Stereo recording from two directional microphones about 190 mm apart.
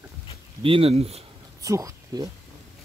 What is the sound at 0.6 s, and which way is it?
Speech, 30° right (ahead or behind).